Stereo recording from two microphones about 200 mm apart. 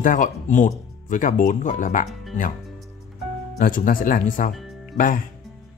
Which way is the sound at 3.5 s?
40° left (ahead or behind).